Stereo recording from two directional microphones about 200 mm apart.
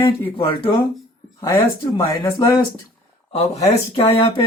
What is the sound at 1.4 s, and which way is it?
Speech, 15° left (ahead or behind).